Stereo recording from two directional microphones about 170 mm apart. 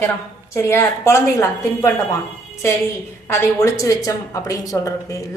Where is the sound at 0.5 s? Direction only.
15° left (ahead or behind).